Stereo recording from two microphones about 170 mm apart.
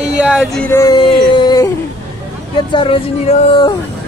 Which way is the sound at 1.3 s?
25° left (ahead or behind).